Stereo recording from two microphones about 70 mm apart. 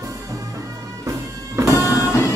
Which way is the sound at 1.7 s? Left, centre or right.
Left.